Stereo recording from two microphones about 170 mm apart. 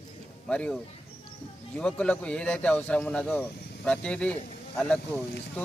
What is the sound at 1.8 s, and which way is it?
Speech, 5° left (ahead or behind).